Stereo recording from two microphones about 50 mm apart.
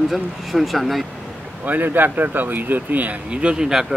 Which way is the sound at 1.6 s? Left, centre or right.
Right.